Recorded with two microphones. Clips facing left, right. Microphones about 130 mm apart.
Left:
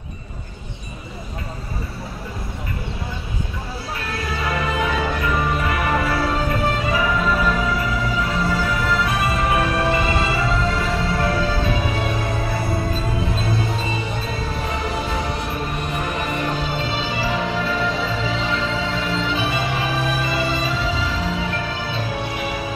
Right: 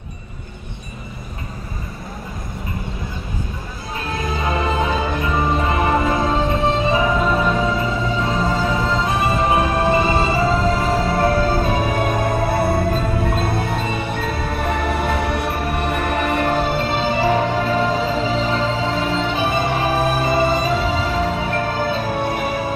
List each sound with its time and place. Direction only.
4.0 s music: 20° right (ahead or behind); by 22.6 s 50° right (ahead or behind)